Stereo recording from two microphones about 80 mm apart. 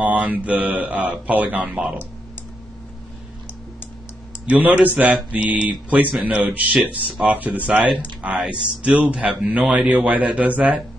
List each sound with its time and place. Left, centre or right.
0.0 s speech: right
4.5 s a man's voice: centre